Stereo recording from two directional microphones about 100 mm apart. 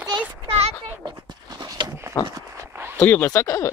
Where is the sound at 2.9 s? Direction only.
20° left (ahead or behind).